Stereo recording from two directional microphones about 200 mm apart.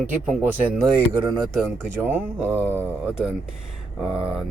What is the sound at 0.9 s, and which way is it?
Speech, 20° right (ahead or behind).